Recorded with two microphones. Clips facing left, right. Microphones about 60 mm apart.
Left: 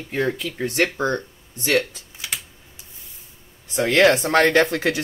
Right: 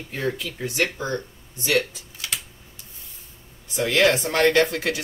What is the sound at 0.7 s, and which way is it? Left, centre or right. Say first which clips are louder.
Speech: left 4 dB; left.